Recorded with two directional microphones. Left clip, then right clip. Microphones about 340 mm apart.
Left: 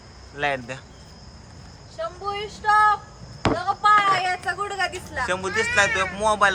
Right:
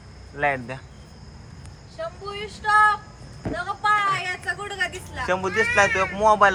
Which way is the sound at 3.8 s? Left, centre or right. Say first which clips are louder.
Left 4 dB; centre.